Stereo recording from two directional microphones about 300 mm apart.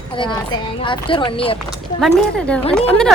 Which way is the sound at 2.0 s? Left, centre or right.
Centre.